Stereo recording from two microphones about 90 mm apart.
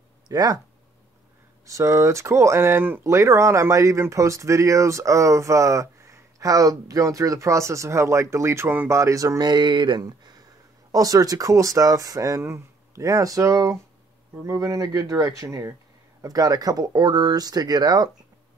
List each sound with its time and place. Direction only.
0.3 s speech: 45° right (ahead or behind)
1.7 s speech: 35° right (ahead or behind)